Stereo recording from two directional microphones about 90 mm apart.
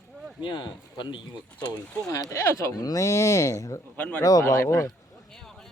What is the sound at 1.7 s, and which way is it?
Speech, 40° left (ahead or behind).